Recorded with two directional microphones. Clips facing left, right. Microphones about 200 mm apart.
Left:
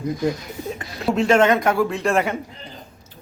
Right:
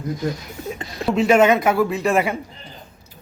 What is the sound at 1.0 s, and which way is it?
Speech, 5° right (ahead or behind).